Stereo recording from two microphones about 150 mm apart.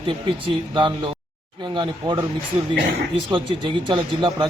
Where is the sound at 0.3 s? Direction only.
35° right (ahead or behind).